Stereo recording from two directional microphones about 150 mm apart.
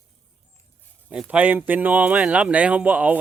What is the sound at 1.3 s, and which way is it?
Speech, 10° right (ahead or behind).